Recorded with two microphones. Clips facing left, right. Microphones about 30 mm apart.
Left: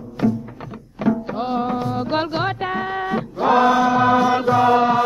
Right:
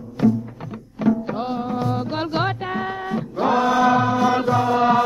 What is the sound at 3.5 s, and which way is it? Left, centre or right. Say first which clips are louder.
Chant: left 4 dB; centre.